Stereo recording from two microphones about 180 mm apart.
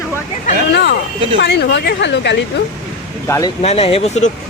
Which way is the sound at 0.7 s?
65° left (ahead or behind).